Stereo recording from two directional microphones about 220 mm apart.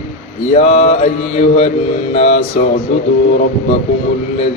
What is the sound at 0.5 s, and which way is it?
Music, 30° left (ahead or behind).